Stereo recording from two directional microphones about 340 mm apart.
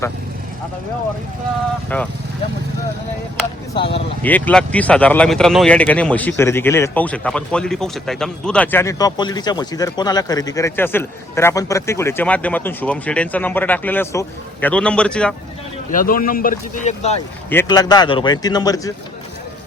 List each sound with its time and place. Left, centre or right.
1.9 s speech: centre
3.8 s a man's voice: centre
15.9 s a man's voice: left
17.5 s a man's voice: centre